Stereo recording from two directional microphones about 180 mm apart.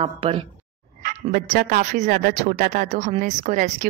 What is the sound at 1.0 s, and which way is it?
Speech, 50° right (ahead or behind).